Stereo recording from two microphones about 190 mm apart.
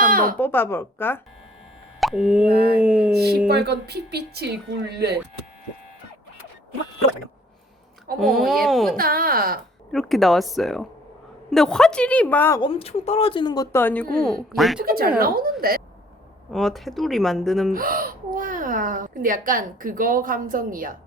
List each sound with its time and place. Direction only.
0.0 s a sound: 50° right (ahead or behind)
0.3 s a woman's voice: 10° left (ahead or behind)
2.0 s plop: centre (ahead or behind)
2.5 s speech: 55° right (ahead or behind)
2.7 s speech: 5° right (ahead or behind)
3.1 s speech: 55° right (ahead or behind)
8.2 s speech: centre (ahead or behind)
9.0 s speech: 50° right (ahead or behind)
9.9 s a woman's voice: centre (ahead or behind)
12.6 s speech: 30° left (ahead or behind); by 14.8 s centre (ahead or behind)
14.8 s speech: 50° right (ahead or behind)
16.5 s speech: centre (ahead or behind)
17.7 s speech: 50° right (ahead or behind)